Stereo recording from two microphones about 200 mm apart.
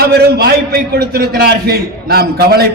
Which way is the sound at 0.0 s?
50° right (ahead or behind).